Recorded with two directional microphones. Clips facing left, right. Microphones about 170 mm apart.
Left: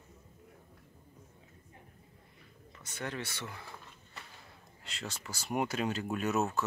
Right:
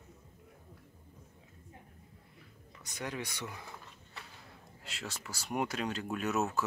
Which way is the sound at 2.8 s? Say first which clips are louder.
Even; 10° right (ahead or behind).